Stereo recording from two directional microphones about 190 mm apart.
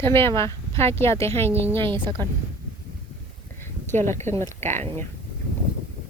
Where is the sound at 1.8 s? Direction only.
25° right (ahead or behind).